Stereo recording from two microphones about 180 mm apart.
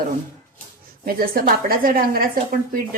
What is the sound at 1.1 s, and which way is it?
A woman's voice, 55° right (ahead or behind).